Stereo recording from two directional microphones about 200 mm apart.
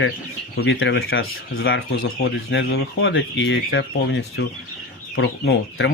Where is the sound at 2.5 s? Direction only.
60° left (ahead or behind).